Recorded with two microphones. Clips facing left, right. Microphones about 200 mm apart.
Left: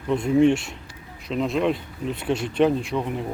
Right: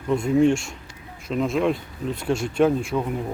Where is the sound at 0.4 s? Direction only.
45° right (ahead or behind).